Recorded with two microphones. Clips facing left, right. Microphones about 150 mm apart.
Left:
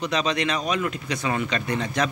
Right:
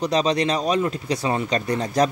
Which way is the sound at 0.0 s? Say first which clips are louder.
Right 4 dB; 35° right (ahead or behind).